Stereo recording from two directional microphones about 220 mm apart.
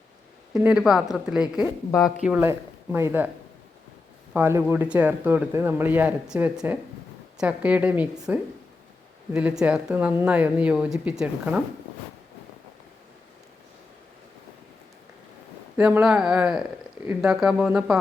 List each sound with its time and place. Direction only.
0.5 s speech: 5° right (ahead or behind)
1.9 s speech: 15° left (ahead or behind)
2.2 s speech: 10° right (ahead or behind)
4.4 s speech: 10° right (ahead or behind)
15.8 s speech: 5° right (ahead or behind)